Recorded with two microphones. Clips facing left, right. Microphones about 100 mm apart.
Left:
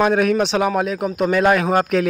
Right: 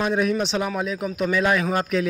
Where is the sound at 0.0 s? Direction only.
70° left (ahead or behind).